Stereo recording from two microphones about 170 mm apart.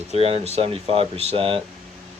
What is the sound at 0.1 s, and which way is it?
Speech, 35° right (ahead or behind).